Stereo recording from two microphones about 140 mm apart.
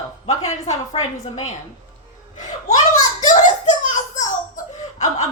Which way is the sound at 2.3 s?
65° left (ahead or behind).